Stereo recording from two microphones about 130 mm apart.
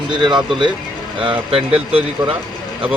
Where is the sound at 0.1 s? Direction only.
35° right (ahead or behind).